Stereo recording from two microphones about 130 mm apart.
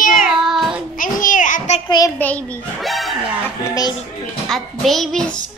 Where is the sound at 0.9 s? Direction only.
90° left.